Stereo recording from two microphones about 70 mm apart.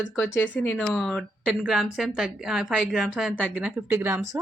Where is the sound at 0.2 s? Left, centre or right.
Left.